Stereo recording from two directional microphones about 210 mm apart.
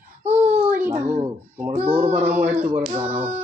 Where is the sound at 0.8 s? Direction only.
10° right (ahead or behind).